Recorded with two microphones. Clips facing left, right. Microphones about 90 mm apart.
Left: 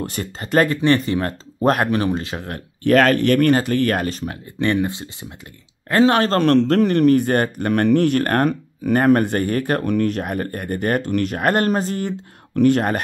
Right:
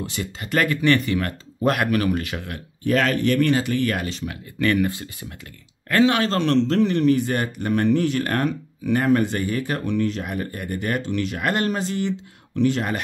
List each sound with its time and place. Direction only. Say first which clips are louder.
0.0 s speech: left 3 dB; 45° left (ahead or behind)
2.8 s a man's voice: left 6 dB; 60° left (ahead or behind); by 5.1 s 25° left (ahead or behind)
5.9 s a man's voice: left 3 dB; 35° left (ahead or behind)